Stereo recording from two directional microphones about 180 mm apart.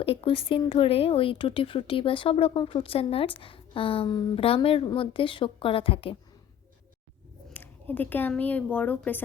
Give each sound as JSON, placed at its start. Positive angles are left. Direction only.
{"t": 0.0, "sound": "speech", "side_deg": 30}
{"t": 7.5, "sound": "speech", "side_deg": 10}